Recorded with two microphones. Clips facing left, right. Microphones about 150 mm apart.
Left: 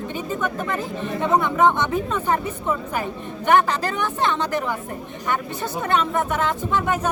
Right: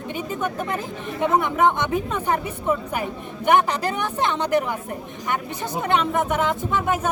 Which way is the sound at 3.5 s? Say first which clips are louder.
Left 1 dB; 15° right (ahead or behind).